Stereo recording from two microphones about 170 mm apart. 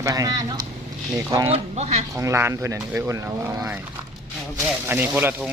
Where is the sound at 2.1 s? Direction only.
15° right (ahead or behind).